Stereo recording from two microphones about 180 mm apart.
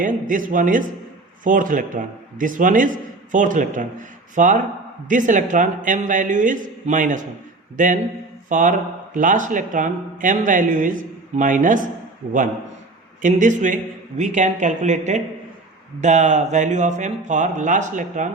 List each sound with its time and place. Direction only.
0.0 s speech: 45° right (ahead or behind)